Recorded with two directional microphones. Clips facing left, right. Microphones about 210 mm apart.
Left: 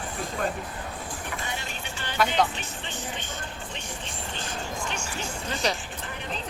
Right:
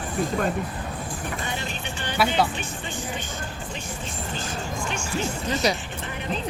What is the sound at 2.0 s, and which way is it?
Speech, 10° right (ahead or behind).